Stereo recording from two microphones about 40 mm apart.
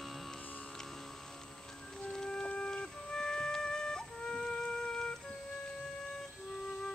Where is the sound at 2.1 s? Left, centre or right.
Left.